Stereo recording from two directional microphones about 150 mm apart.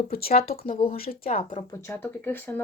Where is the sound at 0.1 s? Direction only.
90° left.